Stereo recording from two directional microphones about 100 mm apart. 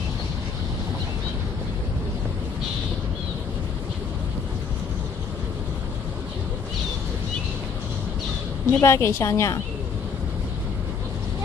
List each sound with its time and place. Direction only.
8.6 s a woman's voice: 25° left (ahead or behind)